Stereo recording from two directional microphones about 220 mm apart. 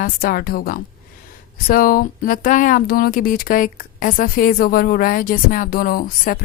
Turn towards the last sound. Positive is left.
turn(degrees=40)  # may be behind; listen again after turning